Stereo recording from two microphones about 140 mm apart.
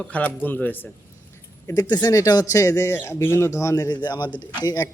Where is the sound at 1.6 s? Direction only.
25° left (ahead or behind).